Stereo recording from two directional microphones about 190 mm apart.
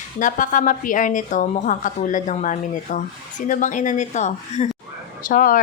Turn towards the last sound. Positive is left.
turn(degrees=45)  # may be behind; listen again after turning